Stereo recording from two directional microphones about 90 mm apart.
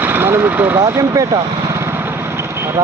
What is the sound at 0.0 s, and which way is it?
Vehicle, 25° right (ahead or behind).